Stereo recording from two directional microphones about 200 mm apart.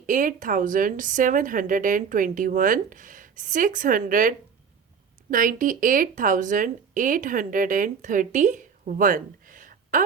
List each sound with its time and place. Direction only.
0.0 s speech: 40° right (ahead or behind)